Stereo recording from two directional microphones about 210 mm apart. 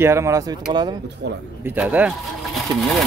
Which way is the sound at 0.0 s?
15° right (ahead or behind).